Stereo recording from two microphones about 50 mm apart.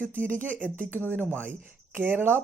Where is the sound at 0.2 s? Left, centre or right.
Right.